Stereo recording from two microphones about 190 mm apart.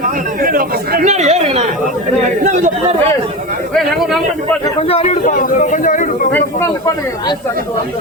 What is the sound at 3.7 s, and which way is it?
Speech, centre (ahead or behind).